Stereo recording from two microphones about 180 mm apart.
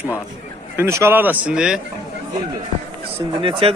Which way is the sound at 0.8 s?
15° right (ahead or behind).